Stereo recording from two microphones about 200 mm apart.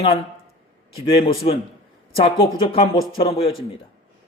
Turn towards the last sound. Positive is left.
turn(degrees=25)  # may be behind; listen again after turning